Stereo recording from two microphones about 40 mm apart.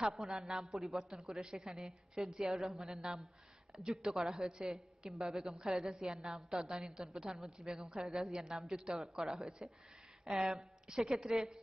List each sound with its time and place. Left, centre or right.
0.0 s a woman's voice: centre
5.1 s a woman's voice: centre
10.5 s a woman's voice: centre